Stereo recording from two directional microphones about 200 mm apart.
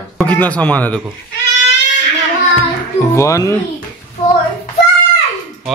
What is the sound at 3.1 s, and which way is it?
Speech, 15° left (ahead or behind).